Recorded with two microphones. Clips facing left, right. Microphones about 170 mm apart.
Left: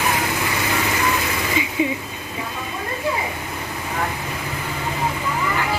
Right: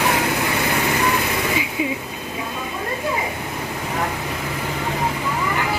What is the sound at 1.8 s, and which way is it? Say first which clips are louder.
Vehicle: left 3 dB; 5° right (ahead or behind).